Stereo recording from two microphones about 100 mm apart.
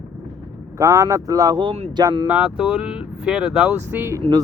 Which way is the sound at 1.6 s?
70° right (ahead or behind).